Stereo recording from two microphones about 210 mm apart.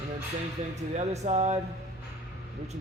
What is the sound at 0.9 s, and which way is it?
Speech, 30° right (ahead or behind).